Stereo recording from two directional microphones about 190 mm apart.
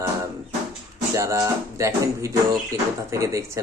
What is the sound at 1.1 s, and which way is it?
Speech, 15° right (ahead or behind).